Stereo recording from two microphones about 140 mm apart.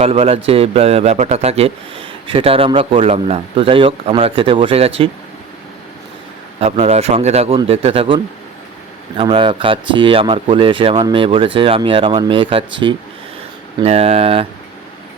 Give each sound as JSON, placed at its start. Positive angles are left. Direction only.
{"t": 0.0, "sound": "a man's voice", "side_deg": -45}
{"t": 6.6, "sound": "a man's voice", "side_deg": -50}